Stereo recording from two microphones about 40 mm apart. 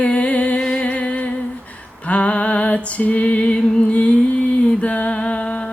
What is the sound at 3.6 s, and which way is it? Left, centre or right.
Music, centre.